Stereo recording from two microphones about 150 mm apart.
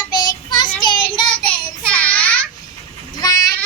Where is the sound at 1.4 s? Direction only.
10° left (ahead or behind).